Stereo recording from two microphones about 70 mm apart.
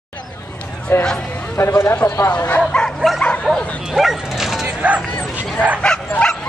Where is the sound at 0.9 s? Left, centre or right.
Left.